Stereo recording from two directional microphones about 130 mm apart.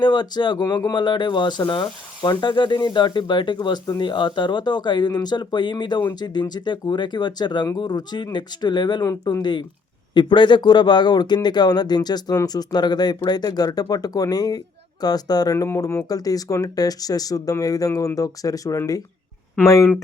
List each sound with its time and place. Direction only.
0.0 s speech: 35° left (ahead or behind)